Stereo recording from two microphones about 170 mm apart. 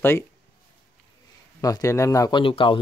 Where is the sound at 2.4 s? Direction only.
30° left (ahead or behind).